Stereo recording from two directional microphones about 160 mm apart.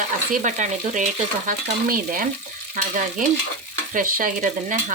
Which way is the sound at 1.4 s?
60° right (ahead or behind).